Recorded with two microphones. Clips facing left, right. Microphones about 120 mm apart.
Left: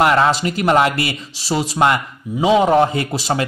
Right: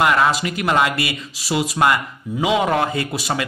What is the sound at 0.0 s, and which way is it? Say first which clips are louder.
A man's voice: left 3 dB; 30° left (ahead or behind).